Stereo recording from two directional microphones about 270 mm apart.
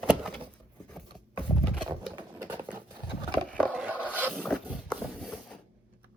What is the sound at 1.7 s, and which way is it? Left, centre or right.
Pigeon, centre.